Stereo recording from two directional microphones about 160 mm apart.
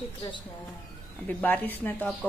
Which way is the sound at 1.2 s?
10° left (ahead or behind).